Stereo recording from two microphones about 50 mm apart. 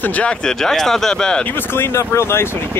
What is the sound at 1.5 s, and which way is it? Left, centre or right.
Speech, left.